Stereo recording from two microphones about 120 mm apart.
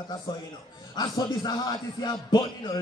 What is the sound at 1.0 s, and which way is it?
Speech, 35° left (ahead or behind).